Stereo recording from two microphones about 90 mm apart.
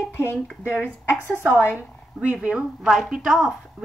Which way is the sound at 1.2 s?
20° right (ahead or behind).